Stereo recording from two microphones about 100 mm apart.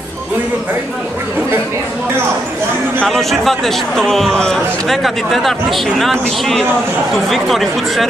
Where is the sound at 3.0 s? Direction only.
Centre (ahead or behind).